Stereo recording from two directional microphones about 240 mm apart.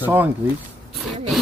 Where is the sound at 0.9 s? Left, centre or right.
Centre.